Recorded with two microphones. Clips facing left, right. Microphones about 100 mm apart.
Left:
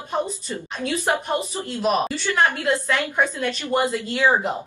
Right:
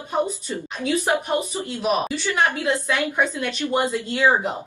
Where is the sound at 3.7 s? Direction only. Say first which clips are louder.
Left 1 dB; centre (ahead or behind).